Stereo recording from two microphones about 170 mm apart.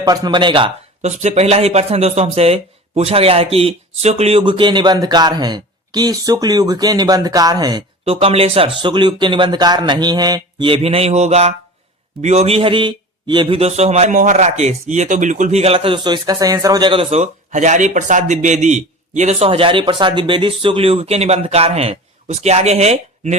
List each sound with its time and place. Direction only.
0.0 s speech: 20° right (ahead or behind)
1.2 s a man's voice: 40° right (ahead or behind)